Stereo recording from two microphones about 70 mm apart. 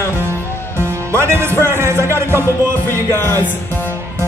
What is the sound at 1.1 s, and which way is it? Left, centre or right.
Speech, right.